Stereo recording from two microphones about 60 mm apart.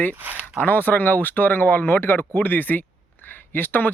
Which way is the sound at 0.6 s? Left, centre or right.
Left.